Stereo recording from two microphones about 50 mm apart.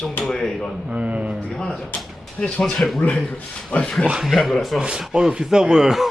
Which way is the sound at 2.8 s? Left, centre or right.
Centre.